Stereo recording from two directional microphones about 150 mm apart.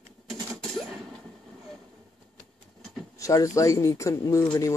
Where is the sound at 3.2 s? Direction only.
20° left (ahead or behind).